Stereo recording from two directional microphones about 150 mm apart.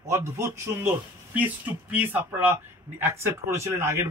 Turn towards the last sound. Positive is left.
turn(degrees=-20)  # may be behind; listen again after turning